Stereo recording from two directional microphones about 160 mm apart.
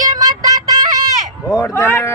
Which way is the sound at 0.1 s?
25° right (ahead or behind).